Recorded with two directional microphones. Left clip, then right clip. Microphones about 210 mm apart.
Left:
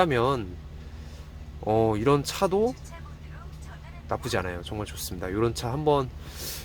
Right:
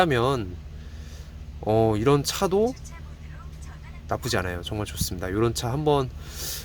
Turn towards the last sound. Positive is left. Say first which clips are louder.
# right 3 dB
turn(degrees=-15)  # may be behind; listen again after turning